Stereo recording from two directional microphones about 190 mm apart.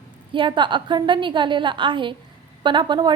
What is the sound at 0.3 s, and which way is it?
A woman's voice, 25° right (ahead or behind).